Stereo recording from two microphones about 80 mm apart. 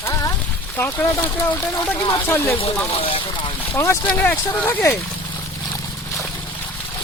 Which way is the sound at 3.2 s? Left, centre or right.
Left.